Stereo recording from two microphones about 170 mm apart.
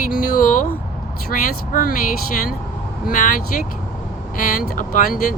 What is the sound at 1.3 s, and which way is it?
Speech, 55° left (ahead or behind).